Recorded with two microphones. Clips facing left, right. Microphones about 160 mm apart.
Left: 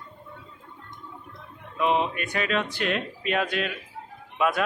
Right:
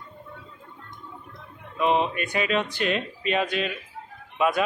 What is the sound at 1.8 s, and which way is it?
A man's voice, centre (ahead or behind).